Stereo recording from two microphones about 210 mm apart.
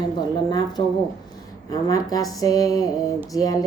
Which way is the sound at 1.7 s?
15° left (ahead or behind).